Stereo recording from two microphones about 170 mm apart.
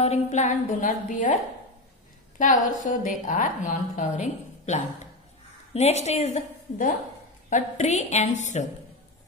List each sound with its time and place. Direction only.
0.0 s a woman's voice: 40° left (ahead or behind)